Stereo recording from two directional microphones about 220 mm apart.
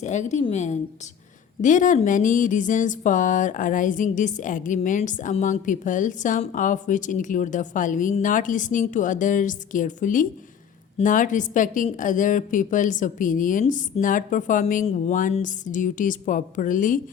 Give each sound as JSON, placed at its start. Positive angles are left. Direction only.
{"t": 0.0, "sound": "speech", "side_deg": 35}